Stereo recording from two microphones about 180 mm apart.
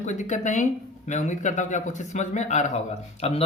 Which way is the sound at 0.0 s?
40° left (ahead or behind).